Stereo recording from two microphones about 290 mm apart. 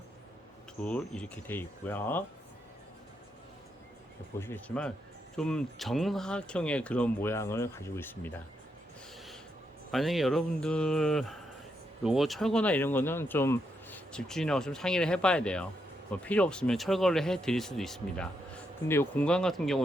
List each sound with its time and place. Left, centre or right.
0.8 s speech: centre
4.4 s speech: centre
9.9 s speech: centre